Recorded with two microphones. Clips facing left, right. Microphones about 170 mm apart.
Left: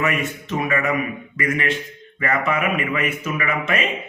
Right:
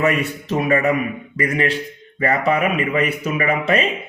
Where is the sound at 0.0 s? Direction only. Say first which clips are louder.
Right 4 dB; 35° right (ahead or behind).